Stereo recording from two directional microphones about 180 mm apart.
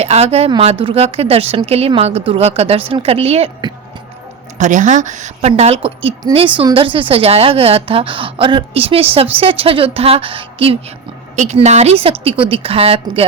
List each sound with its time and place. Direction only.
0.0 s a woman's voice: 35° right (ahead or behind)